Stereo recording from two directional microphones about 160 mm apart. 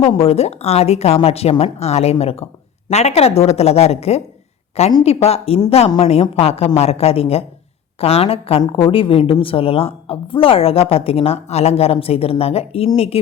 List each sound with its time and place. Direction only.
0.0 s a woman's voice: 35° left (ahead or behind)